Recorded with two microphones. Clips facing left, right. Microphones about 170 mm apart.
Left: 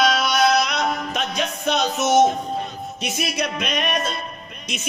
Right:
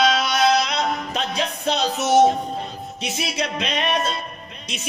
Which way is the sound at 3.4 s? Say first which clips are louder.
Right 1 dB; 30° right (ahead or behind).